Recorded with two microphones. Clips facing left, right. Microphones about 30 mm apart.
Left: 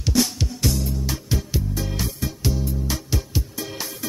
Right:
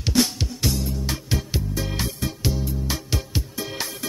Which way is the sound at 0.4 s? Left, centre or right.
Centre.